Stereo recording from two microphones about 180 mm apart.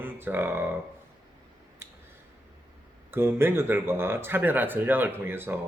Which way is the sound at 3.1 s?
15° right (ahead or behind).